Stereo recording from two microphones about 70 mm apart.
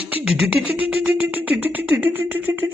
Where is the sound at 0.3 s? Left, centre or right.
Centre.